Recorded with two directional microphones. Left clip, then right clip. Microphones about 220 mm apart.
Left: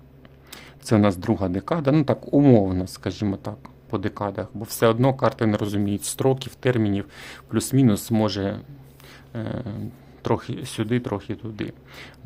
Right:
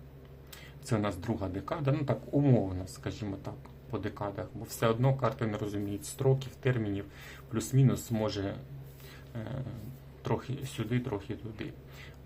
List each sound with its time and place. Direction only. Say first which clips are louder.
0.5 s speech: left 13 dB; 50° left (ahead or behind)